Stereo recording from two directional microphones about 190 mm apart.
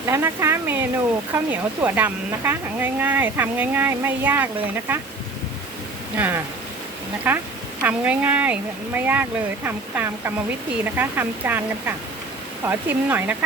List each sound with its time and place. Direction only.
0.0 s speech: 15° right (ahead or behind)
6.1 s speech: 10° right (ahead or behind)